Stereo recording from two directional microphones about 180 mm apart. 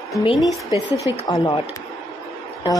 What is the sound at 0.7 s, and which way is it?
Speech, 20° left (ahead or behind).